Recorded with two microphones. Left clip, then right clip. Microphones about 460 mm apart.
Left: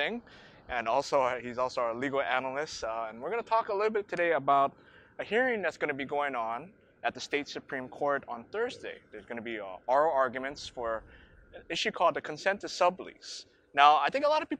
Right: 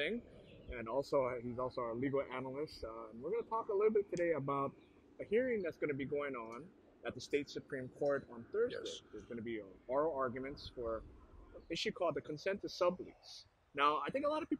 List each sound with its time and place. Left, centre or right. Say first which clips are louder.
0.7 s speech: left 10 dB; left
4.1 s speech: left 11 dB; centre
5.2 s speech: left 7 dB; left
11.7 s speech: left 10 dB; left